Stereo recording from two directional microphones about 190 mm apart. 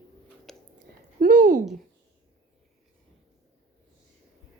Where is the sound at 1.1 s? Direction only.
45° right (ahead or behind).